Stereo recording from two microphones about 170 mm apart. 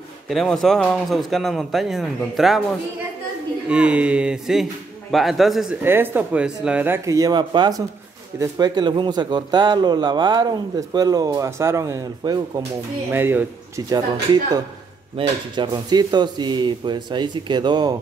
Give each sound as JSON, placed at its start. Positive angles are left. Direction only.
{"t": 0.3, "sound": "speech", "side_deg": 0}
{"t": 3.6, "sound": "a man's voice", "side_deg": -5}